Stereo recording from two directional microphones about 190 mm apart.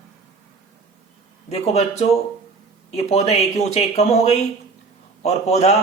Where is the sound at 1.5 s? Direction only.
35° left (ahead or behind).